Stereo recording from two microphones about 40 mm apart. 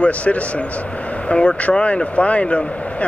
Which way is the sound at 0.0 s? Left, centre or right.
Left.